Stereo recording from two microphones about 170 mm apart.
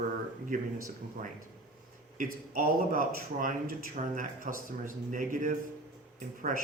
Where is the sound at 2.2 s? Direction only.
55° right (ahead or behind).